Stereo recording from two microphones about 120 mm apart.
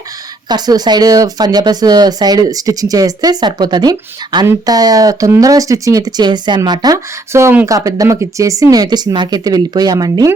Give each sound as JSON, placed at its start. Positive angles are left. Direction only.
{"t": 0.4, "sound": "speech", "side_deg": -35}